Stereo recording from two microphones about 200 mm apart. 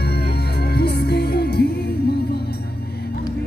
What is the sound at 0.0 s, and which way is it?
Music, 50° left (ahead or behind).